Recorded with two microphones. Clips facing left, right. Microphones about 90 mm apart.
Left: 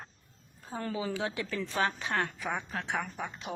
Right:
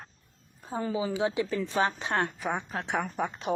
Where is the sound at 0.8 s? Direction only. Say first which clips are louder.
Right 5 dB; 15° right (ahead or behind).